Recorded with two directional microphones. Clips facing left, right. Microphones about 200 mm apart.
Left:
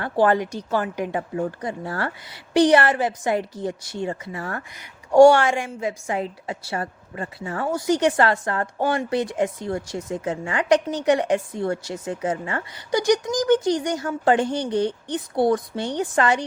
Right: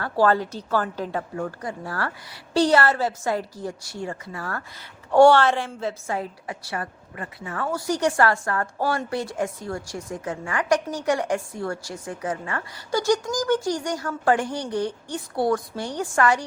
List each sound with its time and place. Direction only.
0.0 s speech: 20° left (ahead or behind)